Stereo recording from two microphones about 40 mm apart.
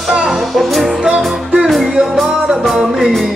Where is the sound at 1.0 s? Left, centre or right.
Right.